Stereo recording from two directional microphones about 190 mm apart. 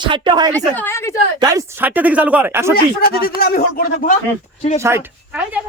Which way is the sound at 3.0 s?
55° left (ahead or behind).